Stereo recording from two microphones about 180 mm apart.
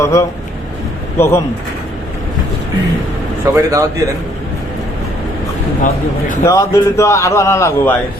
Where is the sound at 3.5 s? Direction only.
20° right (ahead or behind).